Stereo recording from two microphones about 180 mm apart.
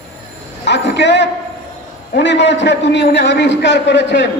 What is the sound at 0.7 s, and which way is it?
A man's voice, 75° left (ahead or behind).